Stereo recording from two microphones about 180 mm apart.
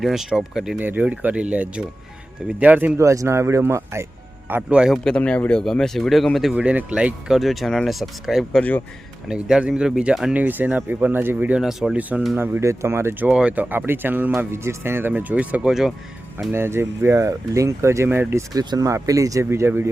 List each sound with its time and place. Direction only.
0.0 s a man's voice: centre (ahead or behind)
9.3 s speech: 5° right (ahead or behind)
12.4 s speech: 15° right (ahead or behind)
16.5 s speech: 15° right (ahead or behind)